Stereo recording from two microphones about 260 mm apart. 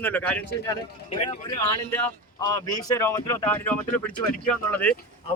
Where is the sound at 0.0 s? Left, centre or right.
Centre.